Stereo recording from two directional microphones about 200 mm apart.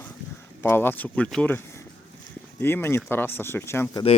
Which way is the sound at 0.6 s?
10° left (ahead or behind).